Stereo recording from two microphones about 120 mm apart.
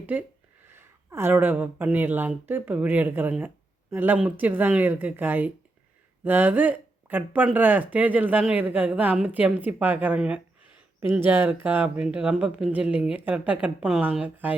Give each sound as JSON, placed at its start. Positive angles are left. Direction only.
{"t": 0.0, "sound": "speech", "side_deg": -15}